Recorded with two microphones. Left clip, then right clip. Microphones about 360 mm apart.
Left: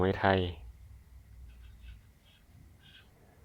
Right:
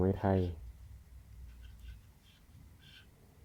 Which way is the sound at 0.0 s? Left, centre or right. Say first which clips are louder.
Left 5 dB; left.